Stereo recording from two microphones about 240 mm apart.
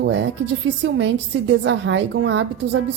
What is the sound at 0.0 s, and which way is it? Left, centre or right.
A woman's voice, right.